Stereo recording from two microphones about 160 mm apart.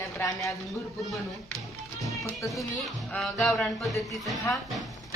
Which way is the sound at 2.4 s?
20° left (ahead or behind).